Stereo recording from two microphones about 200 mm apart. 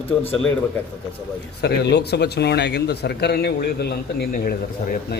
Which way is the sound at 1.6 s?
55° left (ahead or behind).